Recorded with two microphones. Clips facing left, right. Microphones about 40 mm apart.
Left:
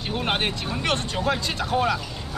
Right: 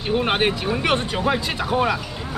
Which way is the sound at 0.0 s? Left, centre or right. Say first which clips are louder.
Right 5 dB; centre.